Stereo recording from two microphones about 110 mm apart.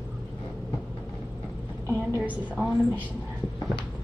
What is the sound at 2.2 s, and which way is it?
Speech, 15° right (ahead or behind).